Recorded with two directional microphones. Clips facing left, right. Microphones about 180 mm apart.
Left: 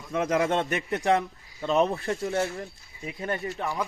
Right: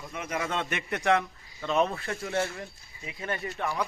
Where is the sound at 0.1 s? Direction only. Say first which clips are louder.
Left 9 dB; 90° left.